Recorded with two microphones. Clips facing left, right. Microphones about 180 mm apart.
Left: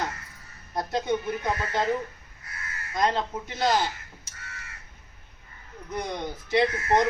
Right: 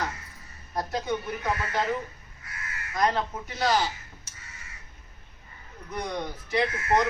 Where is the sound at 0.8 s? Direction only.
25° left (ahead or behind).